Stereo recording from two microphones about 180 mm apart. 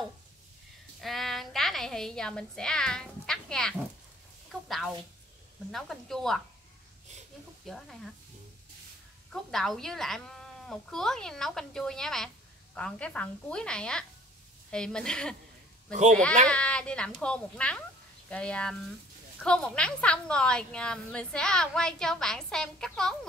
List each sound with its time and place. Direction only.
1.0 s a woman's voice: centre (ahead or behind)
7.6 s a woman's voice: centre (ahead or behind)
9.3 s a woman's voice: centre (ahead or behind)
15.9 s a child's voice: 45° right (ahead or behind)
16.4 s a woman's voice: 5° left (ahead or behind)